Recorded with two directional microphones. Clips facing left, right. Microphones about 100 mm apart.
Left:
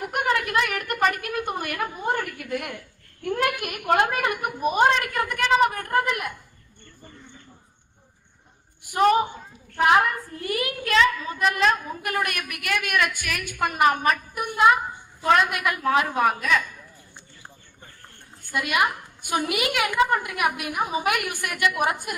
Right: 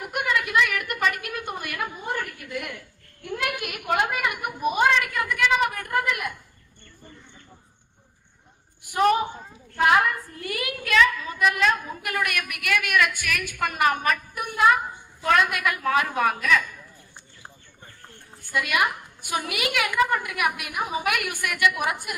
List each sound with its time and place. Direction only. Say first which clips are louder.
0.0 s a woman's voice: left 2 dB; 40° left (ahead or behind)
8.9 s a woman's voice: left 2 dB; 25° left (ahead or behind)
18.5 s a woman's voice: left 1 dB; 25° left (ahead or behind)